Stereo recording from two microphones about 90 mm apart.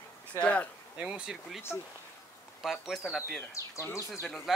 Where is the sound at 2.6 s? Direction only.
Centre (ahead or behind).